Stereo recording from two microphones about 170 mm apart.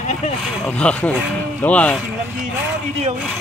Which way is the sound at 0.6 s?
5° left (ahead or behind).